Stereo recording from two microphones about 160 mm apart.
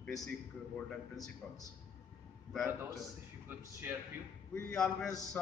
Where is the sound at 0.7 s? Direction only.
5° left (ahead or behind).